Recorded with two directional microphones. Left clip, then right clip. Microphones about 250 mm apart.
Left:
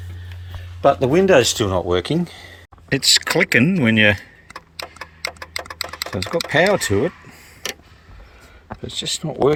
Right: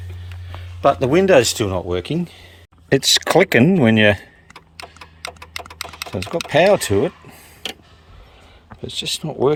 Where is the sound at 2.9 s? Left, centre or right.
Centre.